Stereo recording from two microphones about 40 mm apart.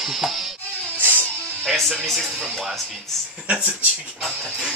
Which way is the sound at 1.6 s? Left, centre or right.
Centre.